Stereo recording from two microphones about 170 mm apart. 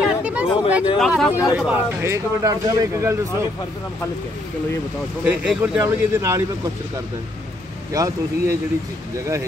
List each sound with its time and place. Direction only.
0.0 s speech: 5° right (ahead or behind)
2.0 s speech: 20° right (ahead or behind)
5.2 s speech: 5° right (ahead or behind)
7.9 s speech: 20° right (ahead or behind)